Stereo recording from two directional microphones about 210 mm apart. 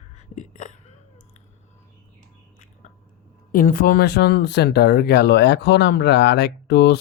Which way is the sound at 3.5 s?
40° left (ahead or behind).